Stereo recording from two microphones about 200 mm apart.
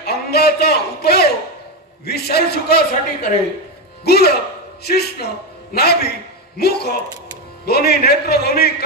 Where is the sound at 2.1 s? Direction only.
50° left (ahead or behind).